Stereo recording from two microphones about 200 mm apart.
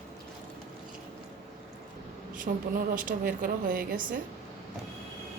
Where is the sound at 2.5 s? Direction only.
40° right (ahead or behind).